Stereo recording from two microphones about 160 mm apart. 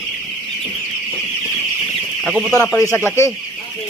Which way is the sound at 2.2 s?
Centre (ahead or behind).